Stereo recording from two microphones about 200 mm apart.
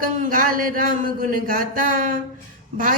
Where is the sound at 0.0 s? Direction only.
45° right (ahead or behind).